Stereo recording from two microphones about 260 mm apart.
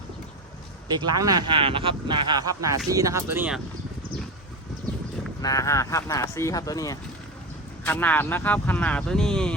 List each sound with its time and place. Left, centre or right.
0.9 s speech: centre
5.4 s speech: centre